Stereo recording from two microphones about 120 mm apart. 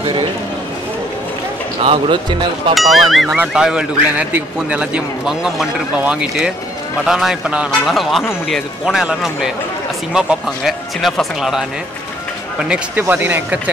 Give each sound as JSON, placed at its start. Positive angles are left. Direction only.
{"t": 0.0, "sound": "a sound", "side_deg": -45}
{"t": 1.8, "sound": "speech", "side_deg": -55}
{"t": 2.7, "sound": "a man's voice", "side_deg": 0}